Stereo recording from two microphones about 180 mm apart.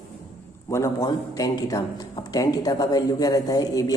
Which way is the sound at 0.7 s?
20° left (ahead or behind).